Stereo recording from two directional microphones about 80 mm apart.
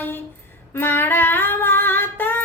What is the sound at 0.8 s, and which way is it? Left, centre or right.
Singing, left.